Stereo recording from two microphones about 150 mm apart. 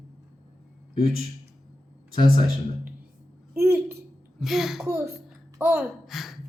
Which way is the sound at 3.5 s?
15° right (ahead or behind).